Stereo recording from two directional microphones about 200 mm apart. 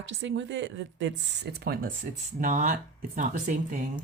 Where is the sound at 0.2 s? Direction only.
65° right (ahead or behind).